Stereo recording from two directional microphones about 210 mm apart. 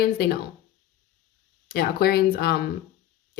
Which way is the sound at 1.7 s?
45° left (ahead or behind).